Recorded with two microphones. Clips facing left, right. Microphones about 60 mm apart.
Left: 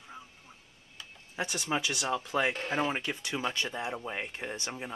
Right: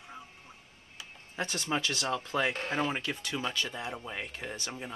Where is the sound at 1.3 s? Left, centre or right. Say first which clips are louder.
Even; centre.